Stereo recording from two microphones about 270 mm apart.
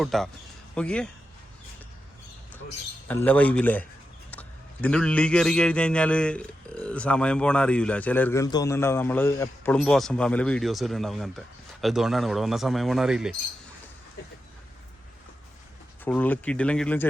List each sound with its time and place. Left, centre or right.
0.0 s a man's voice: centre
3.1 s a man's voice: centre
16.0 s a man's voice: centre